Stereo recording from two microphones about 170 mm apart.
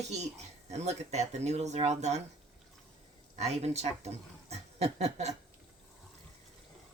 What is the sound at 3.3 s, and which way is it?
Speech, 40° right (ahead or behind).